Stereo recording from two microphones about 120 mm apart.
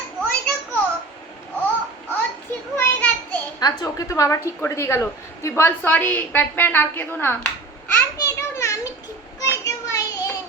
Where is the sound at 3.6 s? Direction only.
30° left (ahead or behind).